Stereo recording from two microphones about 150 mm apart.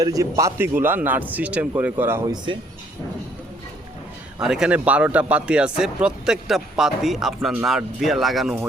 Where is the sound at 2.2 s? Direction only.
30° right (ahead or behind).